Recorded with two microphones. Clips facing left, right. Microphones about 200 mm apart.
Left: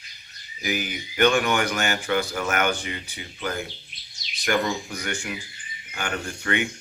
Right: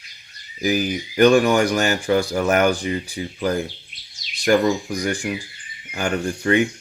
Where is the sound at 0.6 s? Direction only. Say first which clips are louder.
Right 8 dB; 35° right (ahead or behind).